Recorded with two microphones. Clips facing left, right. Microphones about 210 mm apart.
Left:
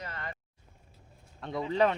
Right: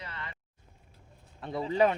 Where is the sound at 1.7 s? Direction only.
10° right (ahead or behind).